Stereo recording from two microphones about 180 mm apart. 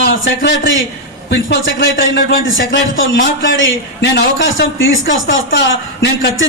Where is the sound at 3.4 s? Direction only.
75° left (ahead or behind).